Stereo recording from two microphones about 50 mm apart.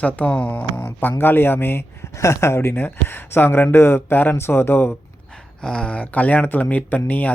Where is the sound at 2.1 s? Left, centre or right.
Left.